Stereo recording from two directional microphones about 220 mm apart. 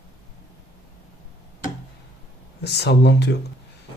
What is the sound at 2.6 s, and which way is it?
Speech, 50° left (ahead or behind).